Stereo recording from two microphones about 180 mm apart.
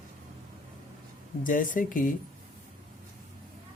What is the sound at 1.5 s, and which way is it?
Speech, 50° left (ahead or behind).